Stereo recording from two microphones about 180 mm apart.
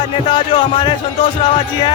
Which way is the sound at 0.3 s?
25° left (ahead or behind).